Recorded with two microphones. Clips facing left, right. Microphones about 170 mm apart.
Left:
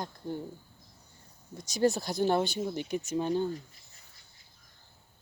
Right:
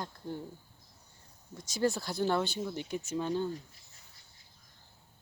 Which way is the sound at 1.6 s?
15° left (ahead or behind).